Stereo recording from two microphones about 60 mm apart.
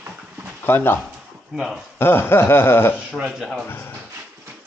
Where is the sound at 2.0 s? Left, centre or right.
Left.